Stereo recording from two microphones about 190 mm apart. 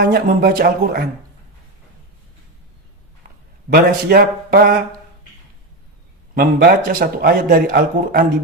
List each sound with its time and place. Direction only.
0.0 s a man's voice: 50° right (ahead or behind)
3.7 s a man's voice: 50° right (ahead or behind)
6.3 s a man's voice: 55° right (ahead or behind)